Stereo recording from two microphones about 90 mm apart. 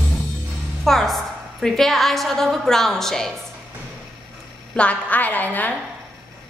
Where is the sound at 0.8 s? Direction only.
5° left (ahead or behind).